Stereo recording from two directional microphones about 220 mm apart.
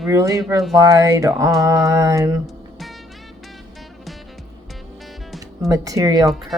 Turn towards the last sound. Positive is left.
turn(degrees=-15)  # may be behind; listen again after turning